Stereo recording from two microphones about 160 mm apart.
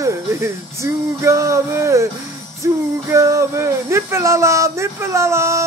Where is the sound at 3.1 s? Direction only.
20° right (ahead or behind).